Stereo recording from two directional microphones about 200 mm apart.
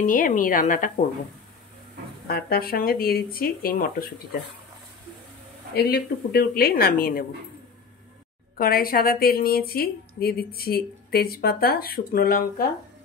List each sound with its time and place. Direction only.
0.0 s a woman's voice: 40° left (ahead or behind)
2.2 s a woman's voice: 50° left (ahead or behind)
5.8 s a woman's voice: 50° left (ahead or behind)
8.5 s a woman's voice: 45° left (ahead or behind)